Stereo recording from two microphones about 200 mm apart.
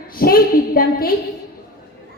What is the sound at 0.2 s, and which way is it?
Child singing, 45° left (ahead or behind).